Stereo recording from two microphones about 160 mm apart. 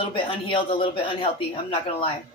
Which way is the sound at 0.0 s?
35° left (ahead or behind).